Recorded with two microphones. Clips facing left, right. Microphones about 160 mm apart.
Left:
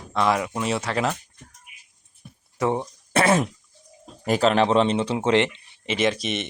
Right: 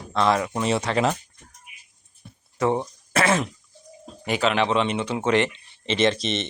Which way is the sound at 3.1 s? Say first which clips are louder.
Left 2 dB; 30° left (ahead or behind).